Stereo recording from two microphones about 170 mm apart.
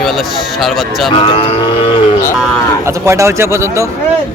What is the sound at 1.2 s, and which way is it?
Cattle, 30° left (ahead or behind).